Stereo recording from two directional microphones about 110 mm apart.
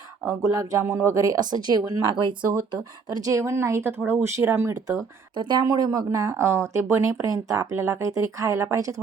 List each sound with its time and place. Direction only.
0.5 s speech: 30° right (ahead or behind)
5.3 s speech: 45° right (ahead or behind)